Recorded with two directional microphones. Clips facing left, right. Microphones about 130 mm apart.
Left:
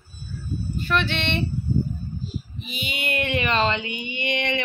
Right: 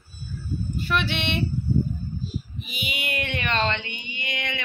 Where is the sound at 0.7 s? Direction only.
15° right (ahead or behind).